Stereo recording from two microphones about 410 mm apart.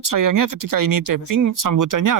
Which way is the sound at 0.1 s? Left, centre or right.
Right.